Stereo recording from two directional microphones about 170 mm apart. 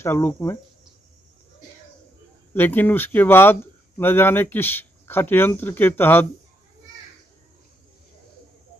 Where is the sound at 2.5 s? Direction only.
10° left (ahead or behind).